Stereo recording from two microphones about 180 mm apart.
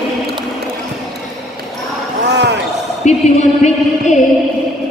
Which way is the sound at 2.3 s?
70° right (ahead or behind).